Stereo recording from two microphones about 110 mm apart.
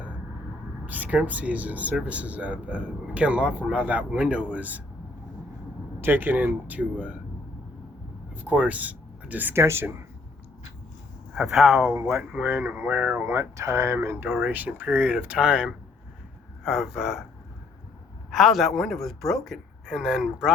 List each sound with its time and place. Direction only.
0.9 s speech: 15° right (ahead or behind)
6.0 s speech: 20° right (ahead or behind)
8.4 s speech: 15° right (ahead or behind)
11.3 s speech: centre (ahead or behind)
11.9 s speech: 25° right (ahead or behind); by 17.2 s 5° right (ahead or behind)
18.3 s speech: centre (ahead or behind)